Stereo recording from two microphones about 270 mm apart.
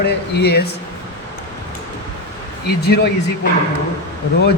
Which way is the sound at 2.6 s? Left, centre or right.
Left.